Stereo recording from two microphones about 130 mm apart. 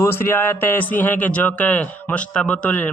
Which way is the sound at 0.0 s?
20° left (ahead or behind).